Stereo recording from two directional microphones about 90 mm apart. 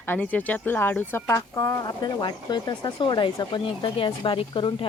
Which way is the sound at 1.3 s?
35° left (ahead or behind).